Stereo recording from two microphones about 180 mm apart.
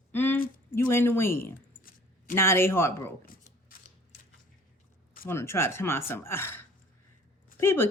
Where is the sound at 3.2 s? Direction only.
55° left (ahead or behind).